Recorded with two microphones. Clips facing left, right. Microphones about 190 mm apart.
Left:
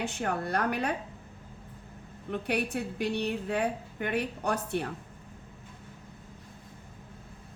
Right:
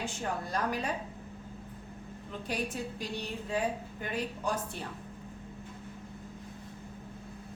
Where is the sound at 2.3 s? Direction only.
65° left (ahead or behind).